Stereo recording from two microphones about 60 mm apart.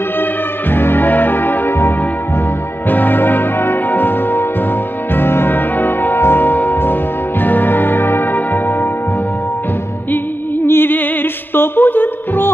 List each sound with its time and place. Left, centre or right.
0.7 s music: left
10.7 s music: left